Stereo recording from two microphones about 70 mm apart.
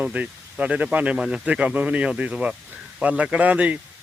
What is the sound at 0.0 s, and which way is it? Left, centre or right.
Speech, centre.